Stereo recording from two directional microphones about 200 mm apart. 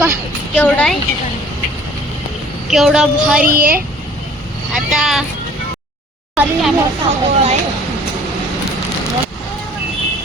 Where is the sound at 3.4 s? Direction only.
45° right (ahead or behind).